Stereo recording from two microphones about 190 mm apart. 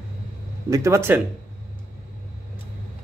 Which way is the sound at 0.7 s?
15° right (ahead or behind).